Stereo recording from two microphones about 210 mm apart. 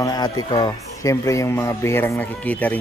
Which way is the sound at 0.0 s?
20° left (ahead or behind).